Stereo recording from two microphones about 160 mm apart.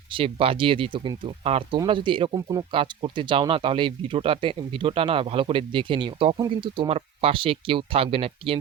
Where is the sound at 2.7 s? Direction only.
30° right (ahead or behind).